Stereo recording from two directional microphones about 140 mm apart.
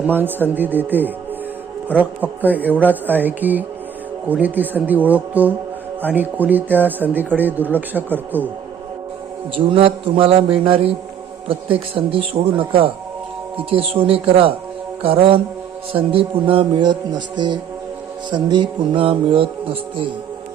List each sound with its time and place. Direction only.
0.1 s a man's voice: 15° right (ahead or behind)
9.6 s speech: 40° right (ahead or behind)
11.9 s speech: 40° right (ahead or behind)